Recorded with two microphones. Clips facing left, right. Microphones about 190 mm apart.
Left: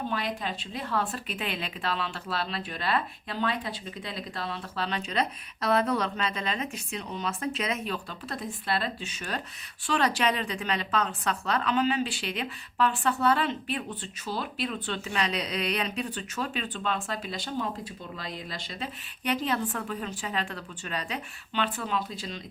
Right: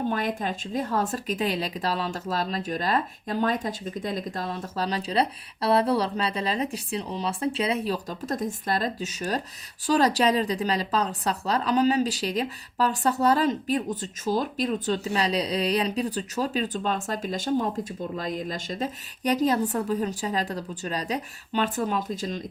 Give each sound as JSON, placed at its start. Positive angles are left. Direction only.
{"t": 0.1, "sound": "speech", "side_deg": -45}